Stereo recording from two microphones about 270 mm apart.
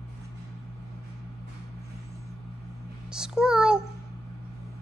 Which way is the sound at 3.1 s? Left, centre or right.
Centre.